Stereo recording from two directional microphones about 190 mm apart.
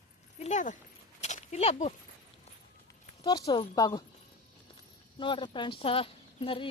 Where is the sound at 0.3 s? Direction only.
35° left (ahead or behind).